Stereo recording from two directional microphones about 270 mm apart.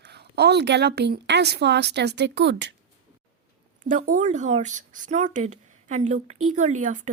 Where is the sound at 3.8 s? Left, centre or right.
Right.